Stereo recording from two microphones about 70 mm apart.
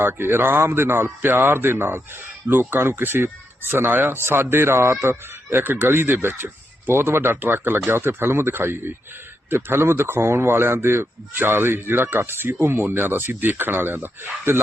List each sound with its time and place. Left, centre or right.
0.0 s speech: right